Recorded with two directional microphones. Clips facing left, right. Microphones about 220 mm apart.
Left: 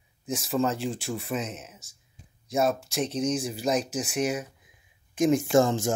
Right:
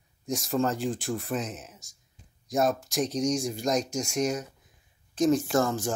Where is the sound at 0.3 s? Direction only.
Centre (ahead or behind).